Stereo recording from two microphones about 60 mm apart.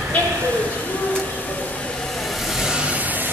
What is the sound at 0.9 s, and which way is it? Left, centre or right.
Vehicle, left.